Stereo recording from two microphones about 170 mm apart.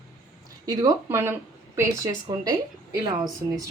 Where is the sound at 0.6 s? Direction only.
20° right (ahead or behind).